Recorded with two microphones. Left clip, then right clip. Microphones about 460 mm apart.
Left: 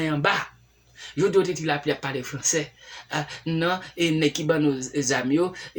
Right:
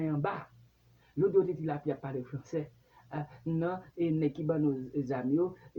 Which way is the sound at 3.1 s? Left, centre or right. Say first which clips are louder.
Left 9 dB; right.